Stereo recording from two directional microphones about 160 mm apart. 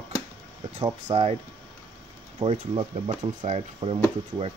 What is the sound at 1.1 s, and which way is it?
Speech, 40° right (ahead or behind).